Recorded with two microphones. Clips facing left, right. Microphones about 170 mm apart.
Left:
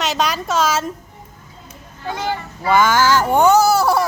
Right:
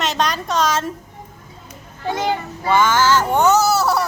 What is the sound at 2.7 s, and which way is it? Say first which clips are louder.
Speech: left 1 dB; 10° left (ahead or behind).